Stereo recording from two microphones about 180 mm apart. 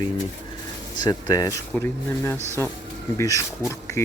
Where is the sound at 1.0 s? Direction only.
20° left (ahead or behind).